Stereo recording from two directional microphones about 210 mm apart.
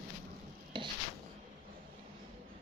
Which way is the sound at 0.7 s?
25° right (ahead or behind).